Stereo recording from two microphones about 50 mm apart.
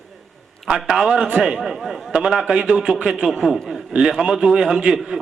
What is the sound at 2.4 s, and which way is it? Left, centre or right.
A man's voice, centre.